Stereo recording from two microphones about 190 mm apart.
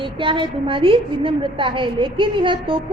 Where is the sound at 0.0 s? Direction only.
25° right (ahead or behind).